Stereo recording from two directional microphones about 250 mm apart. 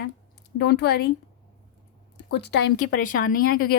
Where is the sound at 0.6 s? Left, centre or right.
Left.